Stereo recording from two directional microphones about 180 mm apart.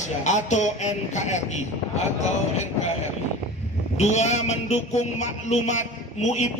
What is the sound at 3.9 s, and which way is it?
A man's voice, 40° left (ahead or behind).